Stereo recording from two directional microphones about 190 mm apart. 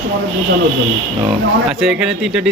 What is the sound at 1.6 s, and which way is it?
Speech, centre (ahead or behind).